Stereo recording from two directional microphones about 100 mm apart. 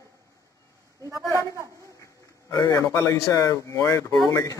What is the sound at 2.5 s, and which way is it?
A man's voice, 30° left (ahead or behind).